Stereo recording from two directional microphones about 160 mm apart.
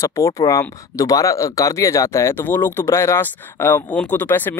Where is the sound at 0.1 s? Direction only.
20° left (ahead or behind).